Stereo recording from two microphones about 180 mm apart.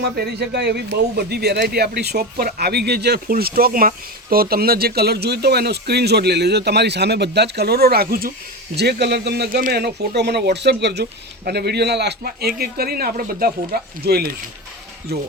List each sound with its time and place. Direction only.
0.0 s a man's voice: 65° right (ahead or behind)